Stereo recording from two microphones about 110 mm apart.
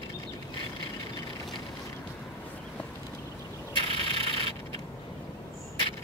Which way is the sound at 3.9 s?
60° right (ahead or behind).